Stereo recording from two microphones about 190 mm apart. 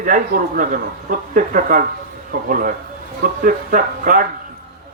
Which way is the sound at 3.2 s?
45° right (ahead or behind).